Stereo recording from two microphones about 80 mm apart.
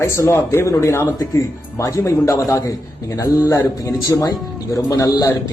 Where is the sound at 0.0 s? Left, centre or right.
Left.